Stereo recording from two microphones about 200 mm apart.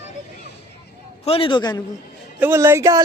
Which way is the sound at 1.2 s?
25° left (ahead or behind).